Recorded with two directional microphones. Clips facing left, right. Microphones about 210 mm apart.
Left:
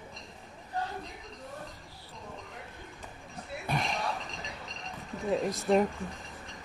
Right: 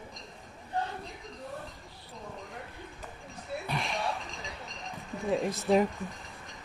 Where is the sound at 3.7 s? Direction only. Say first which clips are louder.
Left 4 dB; 45° left (ahead or behind).